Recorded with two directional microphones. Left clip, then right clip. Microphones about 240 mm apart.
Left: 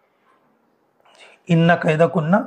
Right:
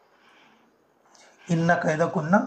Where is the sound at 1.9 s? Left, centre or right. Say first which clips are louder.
Left 6 dB; left.